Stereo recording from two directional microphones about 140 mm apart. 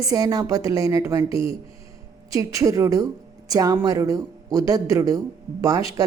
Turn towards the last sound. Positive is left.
turn(degrees=-25)  # may be behind; listen again after turning